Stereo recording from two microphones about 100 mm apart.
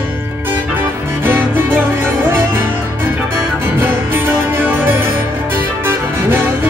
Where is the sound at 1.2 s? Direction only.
20° right (ahead or behind).